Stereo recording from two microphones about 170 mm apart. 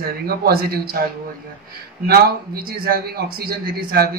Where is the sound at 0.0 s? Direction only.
65° right (ahead or behind).